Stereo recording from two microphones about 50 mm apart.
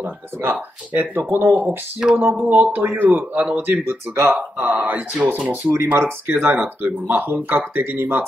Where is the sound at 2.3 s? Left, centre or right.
Right.